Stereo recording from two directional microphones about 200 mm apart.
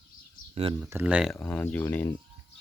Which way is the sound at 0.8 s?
10° right (ahead or behind).